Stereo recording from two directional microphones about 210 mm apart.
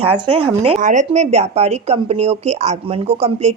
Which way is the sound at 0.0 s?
30° right (ahead or behind).